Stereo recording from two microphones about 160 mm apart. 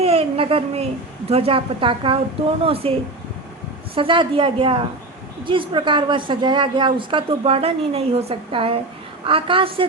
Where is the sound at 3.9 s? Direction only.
30° right (ahead or behind).